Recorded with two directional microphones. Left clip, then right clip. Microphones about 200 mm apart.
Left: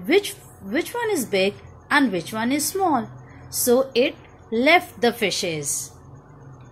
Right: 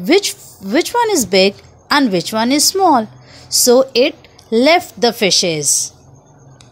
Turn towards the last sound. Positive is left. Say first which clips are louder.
# right 10 dB
turn(degrees=-50)  # may be behind; listen again after turning